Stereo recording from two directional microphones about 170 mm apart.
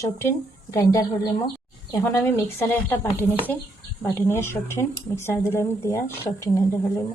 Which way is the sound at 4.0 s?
15° left (ahead or behind).